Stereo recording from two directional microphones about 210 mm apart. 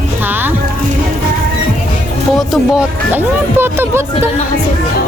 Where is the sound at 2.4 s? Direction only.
5° right (ahead or behind).